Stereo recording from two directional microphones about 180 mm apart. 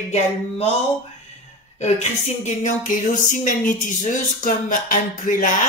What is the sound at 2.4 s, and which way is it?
Music, 40° left (ahead or behind).